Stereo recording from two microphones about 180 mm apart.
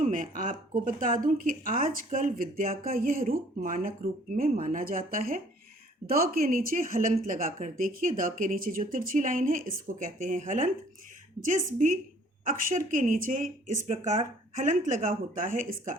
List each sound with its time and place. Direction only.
0.0 s a woman's voice: 45° right (ahead or behind)